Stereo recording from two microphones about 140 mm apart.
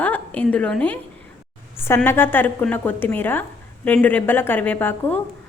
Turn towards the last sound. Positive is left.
turn(degrees=15)  # may be behind; listen again after turning